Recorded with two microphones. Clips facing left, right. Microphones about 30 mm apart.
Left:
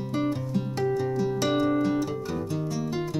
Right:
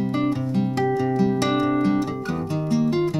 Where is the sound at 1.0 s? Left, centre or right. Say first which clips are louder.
Right 5 dB; right.